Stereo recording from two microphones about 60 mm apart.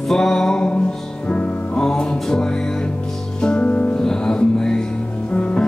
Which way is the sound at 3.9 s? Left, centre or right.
Centre.